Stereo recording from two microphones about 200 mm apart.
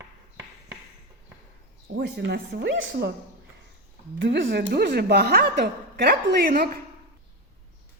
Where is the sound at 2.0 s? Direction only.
60° right (ahead or behind).